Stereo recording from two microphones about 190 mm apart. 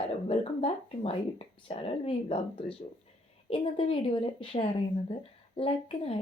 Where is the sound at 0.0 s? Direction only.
30° left (ahead or behind).